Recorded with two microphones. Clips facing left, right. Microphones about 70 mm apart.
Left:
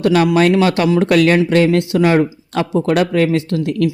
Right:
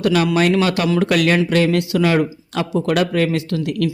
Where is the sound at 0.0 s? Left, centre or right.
Left.